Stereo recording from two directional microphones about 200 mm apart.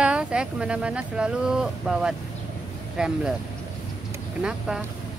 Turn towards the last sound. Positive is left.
turn(degrees=-5)  # may be behind; listen again after turning